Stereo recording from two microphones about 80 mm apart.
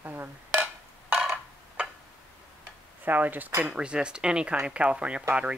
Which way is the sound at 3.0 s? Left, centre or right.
Right.